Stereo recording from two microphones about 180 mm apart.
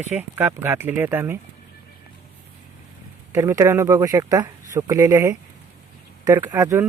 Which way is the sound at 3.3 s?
15° right (ahead or behind).